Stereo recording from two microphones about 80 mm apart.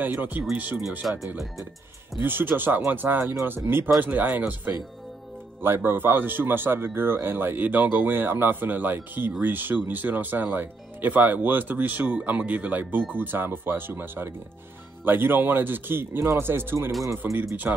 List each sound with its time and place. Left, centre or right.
0.0 s speech: right
1.0 s speech: centre
2.2 s speech: right